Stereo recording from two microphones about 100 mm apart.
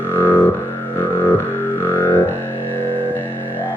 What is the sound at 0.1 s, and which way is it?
Music, 25° left (ahead or behind).